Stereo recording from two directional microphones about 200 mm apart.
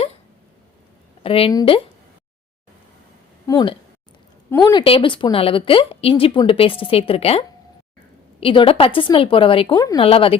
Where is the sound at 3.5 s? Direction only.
20° left (ahead or behind).